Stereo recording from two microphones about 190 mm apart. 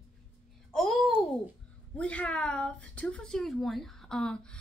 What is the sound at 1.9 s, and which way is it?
A woman's voice, 5° left (ahead or behind).